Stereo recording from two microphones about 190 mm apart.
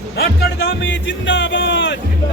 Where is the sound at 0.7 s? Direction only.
75° left (ahead or behind).